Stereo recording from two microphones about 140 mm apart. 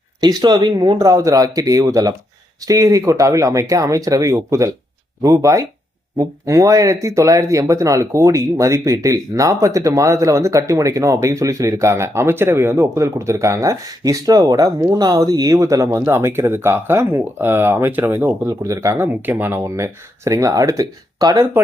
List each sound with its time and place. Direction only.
0.2 s speech: 30° right (ahead or behind)